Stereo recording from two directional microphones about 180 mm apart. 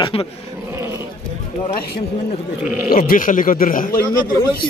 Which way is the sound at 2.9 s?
50° left (ahead or behind).